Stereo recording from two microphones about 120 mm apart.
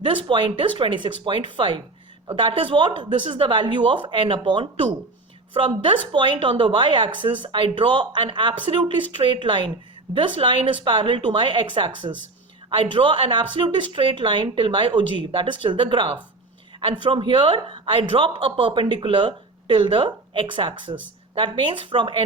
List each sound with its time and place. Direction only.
0.0 s speech: 40° right (ahead or behind)